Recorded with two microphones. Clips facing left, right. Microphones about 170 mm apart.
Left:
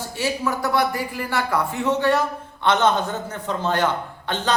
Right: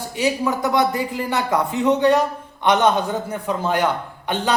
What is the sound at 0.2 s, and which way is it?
A man's voice, 20° right (ahead or behind).